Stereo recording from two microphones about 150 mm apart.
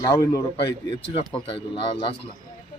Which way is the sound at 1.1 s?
35° left (ahead or behind).